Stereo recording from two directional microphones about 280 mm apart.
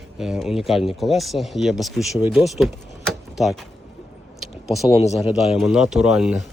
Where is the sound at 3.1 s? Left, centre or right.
Centre.